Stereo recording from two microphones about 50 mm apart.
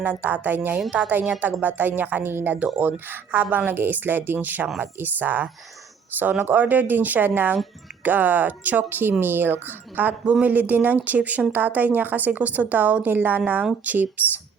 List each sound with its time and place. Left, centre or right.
0.0 s a woman's voice: right
0.9 s a woman's voice: right